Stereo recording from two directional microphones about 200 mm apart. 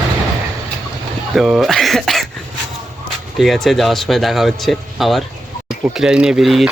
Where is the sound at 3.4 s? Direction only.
Centre (ahead or behind).